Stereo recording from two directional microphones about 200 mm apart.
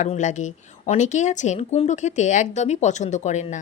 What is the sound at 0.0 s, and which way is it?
Speech, 35° left (ahead or behind).